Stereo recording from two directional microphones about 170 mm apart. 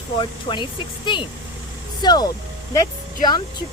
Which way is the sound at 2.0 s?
25° left (ahead or behind).